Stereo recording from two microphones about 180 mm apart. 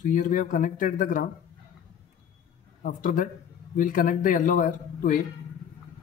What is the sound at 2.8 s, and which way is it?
Speech, 50° left (ahead or behind).